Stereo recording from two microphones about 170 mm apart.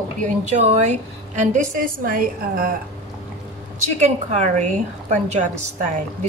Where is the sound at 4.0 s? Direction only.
45° right (ahead or behind).